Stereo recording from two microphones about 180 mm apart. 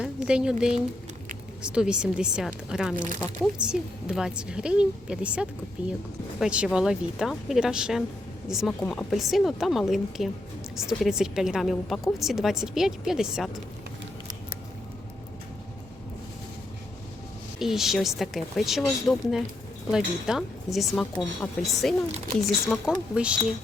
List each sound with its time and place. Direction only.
0.0 s a woman's voice: 5° right (ahead or behind)
2.9 s speech: 45° right (ahead or behind)
3.6 s a woman's voice: 5° right (ahead or behind)
17.6 s a woman's voice: centre (ahead or behind)